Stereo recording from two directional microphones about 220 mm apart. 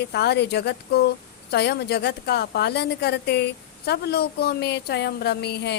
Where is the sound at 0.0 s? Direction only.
50° left (ahead or behind).